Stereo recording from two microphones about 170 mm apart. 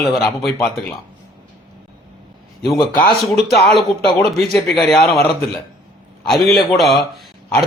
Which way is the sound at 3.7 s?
Centre (ahead or behind).